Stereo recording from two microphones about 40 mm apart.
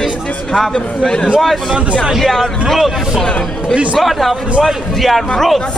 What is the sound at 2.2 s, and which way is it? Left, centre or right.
Speech, centre.